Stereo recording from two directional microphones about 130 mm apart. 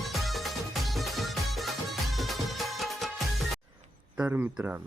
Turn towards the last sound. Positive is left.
turn(degrees=-10)  # may be behind; listen again after turning